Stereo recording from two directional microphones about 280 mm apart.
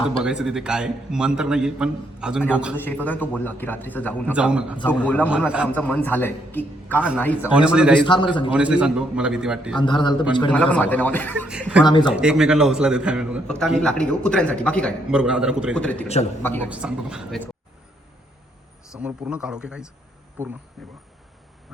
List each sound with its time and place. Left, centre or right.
0.2 s a man's voice: centre
2.7 s a man's voice: centre
7.4 s a man's voice: centre
8.0 s a man's voice: centre
8.5 s a man's voice: centre
9.7 s a man's voice: centre
10.5 s a man's voice: centre
11.9 s a man's voice: centre
12.1 s a man's voice: centre
16.6 s a man's voice: centre
18.9 s a man's voice: centre